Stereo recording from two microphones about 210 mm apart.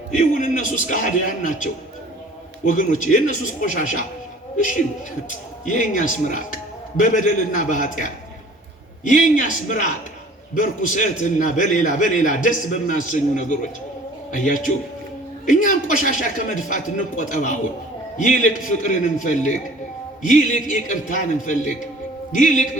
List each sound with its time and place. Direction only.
0.2 s speech: 40° left (ahead or behind)
2.6 s speech: 40° left (ahead or behind)
5.6 s a man's voice: 35° left (ahead or behind)